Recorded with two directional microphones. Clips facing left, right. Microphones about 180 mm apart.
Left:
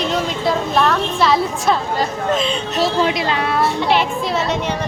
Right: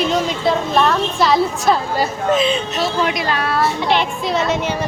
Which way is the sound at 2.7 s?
30° left (ahead or behind).